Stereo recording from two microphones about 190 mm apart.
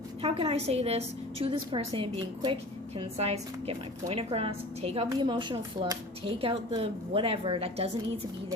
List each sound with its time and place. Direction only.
0.2 s a woman's voice: 30° right (ahead or behind)